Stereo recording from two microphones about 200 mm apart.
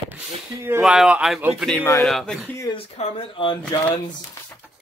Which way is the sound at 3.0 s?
25° left (ahead or behind).